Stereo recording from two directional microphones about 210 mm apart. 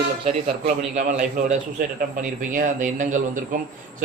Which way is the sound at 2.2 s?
40° right (ahead or behind).